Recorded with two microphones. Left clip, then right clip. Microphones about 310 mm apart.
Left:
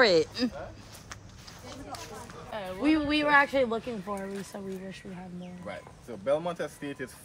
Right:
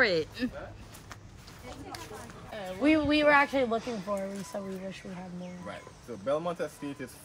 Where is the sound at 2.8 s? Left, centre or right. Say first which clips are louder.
Right 2 dB; centre.